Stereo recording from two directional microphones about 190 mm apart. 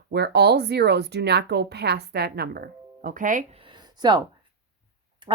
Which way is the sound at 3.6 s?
25° right (ahead or behind).